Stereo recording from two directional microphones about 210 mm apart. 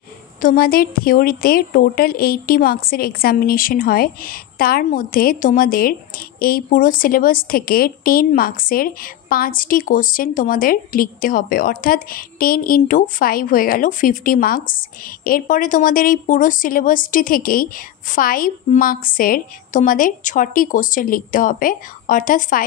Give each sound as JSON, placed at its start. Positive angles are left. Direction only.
{"t": 0.4, "sound": "a woman's voice", "side_deg": 45}